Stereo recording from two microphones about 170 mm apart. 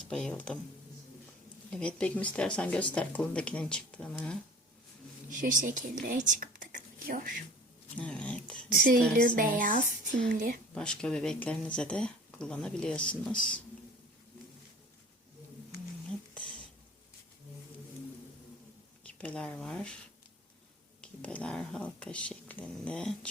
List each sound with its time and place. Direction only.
0.1 s speech: 5° left (ahead or behind)
1.7 s speech: 5° left (ahead or behind)
5.4 s speech: 50° right (ahead or behind)
7.9 s speech: 5° left (ahead or behind)
8.7 s a woman's voice: 55° right (ahead or behind)
10.8 s speech: 5° left (ahead or behind)
19.0 s speech: 5° left (ahead or behind)
21.0 s speech: 5° left (ahead or behind)